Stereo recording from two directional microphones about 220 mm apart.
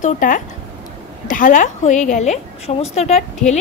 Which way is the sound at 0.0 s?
35° left (ahead or behind).